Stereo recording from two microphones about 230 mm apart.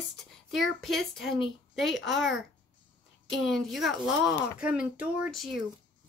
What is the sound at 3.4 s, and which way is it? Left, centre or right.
Speech, centre.